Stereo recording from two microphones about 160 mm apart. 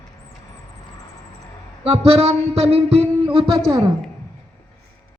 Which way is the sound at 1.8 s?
40° right (ahead or behind).